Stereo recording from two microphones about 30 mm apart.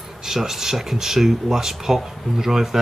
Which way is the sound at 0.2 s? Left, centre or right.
Centre.